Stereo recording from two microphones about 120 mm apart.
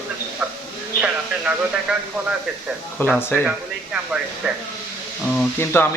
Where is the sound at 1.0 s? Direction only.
10° right (ahead or behind).